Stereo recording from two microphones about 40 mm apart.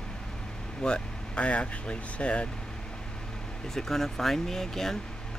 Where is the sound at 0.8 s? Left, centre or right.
Left.